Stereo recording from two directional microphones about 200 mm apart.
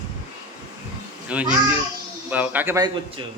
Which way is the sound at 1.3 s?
5° right (ahead or behind).